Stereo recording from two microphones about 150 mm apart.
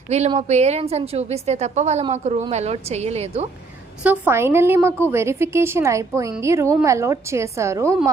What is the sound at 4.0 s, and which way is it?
A woman's voice, 10° right (ahead or behind).